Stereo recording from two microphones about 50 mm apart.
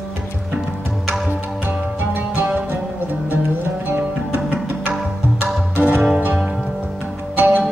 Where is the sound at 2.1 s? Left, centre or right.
Right.